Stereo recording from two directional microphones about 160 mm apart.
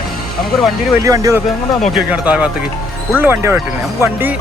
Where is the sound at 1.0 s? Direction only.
20° right (ahead or behind).